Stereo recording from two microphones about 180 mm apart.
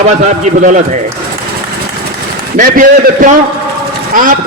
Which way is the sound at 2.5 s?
50° right (ahead or behind).